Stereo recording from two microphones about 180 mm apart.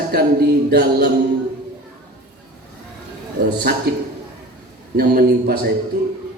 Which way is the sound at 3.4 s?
60° right (ahead or behind).